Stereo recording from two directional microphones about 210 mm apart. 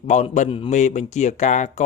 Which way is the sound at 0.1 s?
35° left (ahead or behind).